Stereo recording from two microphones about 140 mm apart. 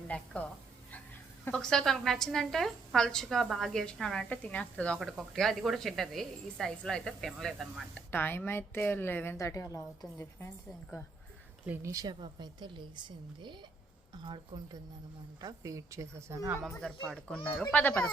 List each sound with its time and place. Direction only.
0.1 s a woman's voice: 10° left (ahead or behind)
1.5 s a woman's voice: 5° left (ahead or behind)
8.1 s a woman's voice: 15° left (ahead or behind)
11.6 s a woman's voice: 15° right (ahead or behind)
16.8 s a woman's voice: 5° left (ahead or behind)